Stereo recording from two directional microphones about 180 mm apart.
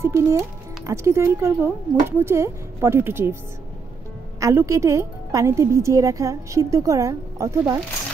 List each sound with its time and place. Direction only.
0.0 s a woman's voice: 15° right (ahead or behind)
4.4 s a woman's voice: 15° right (ahead or behind)